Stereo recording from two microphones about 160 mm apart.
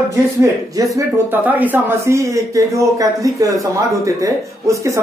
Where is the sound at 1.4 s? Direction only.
10° right (ahead or behind).